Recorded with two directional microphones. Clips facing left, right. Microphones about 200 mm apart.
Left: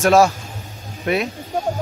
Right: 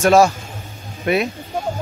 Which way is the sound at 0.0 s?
Centre (ahead or behind).